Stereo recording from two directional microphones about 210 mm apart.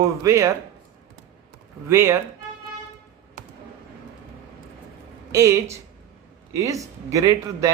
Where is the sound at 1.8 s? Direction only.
10° right (ahead or behind).